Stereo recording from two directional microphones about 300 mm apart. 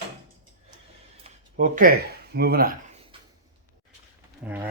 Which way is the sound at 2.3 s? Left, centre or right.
Right.